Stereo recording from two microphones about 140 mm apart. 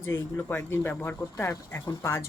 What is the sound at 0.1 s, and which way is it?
Speech, 15° left (ahead or behind).